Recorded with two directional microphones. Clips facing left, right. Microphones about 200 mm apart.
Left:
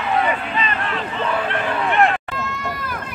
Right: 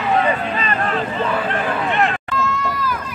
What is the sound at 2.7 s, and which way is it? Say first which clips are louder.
Run: right 4 dB; 55° left (ahead or behind).